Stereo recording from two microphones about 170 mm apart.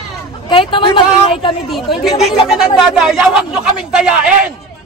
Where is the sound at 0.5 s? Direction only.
30° left (ahead or behind).